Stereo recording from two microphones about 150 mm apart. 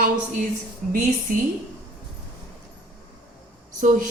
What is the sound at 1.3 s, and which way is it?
Speech, 60° right (ahead or behind).